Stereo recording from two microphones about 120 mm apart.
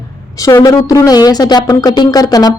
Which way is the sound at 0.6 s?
30° left (ahead or behind).